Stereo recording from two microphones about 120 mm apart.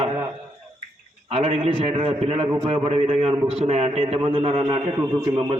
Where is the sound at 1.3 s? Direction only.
55° right (ahead or behind).